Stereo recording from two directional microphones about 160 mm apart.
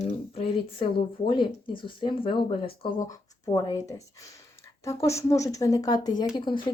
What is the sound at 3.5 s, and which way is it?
Speech, 20° left (ahead or behind).